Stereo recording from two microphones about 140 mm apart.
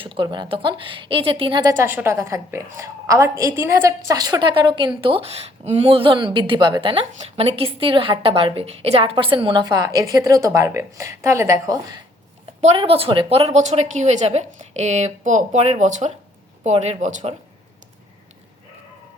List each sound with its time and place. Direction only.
0.0 s a woman's voice: 35° right (ahead or behind)
1.7 s a woman's voice: 15° right (ahead or behind)
12.6 s a woman's voice: 40° right (ahead or behind); by 17.3 s 60° right (ahead or behind)